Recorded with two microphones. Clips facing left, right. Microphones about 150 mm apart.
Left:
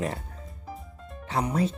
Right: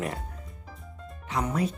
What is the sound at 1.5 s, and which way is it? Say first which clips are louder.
Speech: left 2 dB; 30° left (ahead or behind).